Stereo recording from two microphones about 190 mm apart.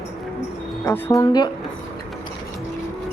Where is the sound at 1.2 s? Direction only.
20° left (ahead or behind).